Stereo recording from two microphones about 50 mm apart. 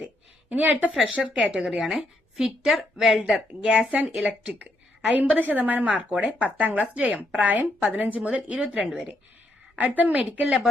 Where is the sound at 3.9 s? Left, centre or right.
Right.